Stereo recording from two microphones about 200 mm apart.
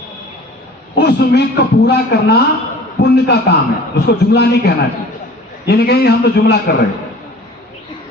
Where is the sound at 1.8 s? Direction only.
55° left (ahead or behind).